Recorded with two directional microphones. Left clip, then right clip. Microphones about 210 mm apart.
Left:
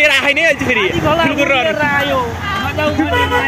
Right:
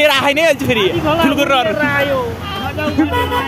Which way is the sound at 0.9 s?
45° left (ahead or behind).